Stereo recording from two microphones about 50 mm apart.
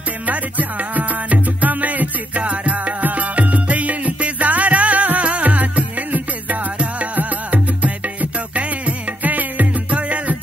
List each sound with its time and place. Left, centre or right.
0.3 s music: right